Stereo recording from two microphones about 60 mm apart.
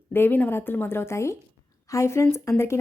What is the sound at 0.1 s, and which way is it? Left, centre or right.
A woman's voice, left.